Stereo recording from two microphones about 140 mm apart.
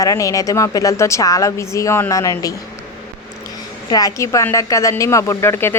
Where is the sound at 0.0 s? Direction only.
25° left (ahead or behind).